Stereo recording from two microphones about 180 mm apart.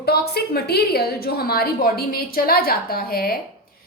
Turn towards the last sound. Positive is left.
turn(degrees=55)  # may be behind; listen again after turning